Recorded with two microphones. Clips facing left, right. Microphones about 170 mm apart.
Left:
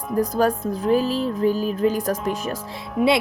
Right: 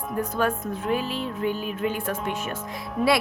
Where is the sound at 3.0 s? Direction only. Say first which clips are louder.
Left 4 dB; 15° left (ahead or behind).